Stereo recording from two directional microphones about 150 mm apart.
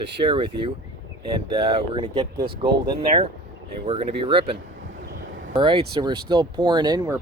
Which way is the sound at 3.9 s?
35° right (ahead or behind).